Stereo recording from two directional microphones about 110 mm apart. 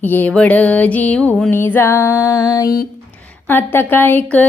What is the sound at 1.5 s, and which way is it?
Music, 20° left (ahead or behind).